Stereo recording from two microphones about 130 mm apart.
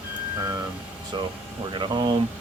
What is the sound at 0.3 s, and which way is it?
Speech, 25° right (ahead or behind).